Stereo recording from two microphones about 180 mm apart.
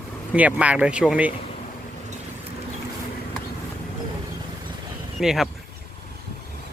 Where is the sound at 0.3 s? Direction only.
10° right (ahead or behind).